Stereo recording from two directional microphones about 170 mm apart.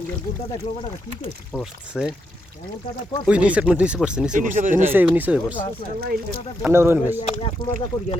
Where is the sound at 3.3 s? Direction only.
5° right (ahead or behind).